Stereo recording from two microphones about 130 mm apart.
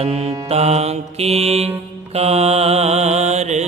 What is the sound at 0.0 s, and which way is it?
Mantra, 50° right (ahead or behind).